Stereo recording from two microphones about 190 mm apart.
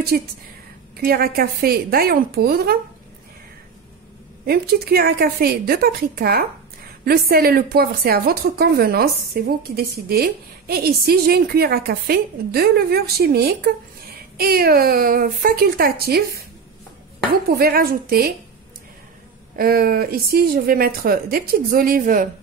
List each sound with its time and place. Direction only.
0.1 s speech: 50° right (ahead or behind)
4.5 s speech: 55° right (ahead or behind)
17.3 s speech: 55° right (ahead or behind)
19.5 s speech: 50° right (ahead or behind)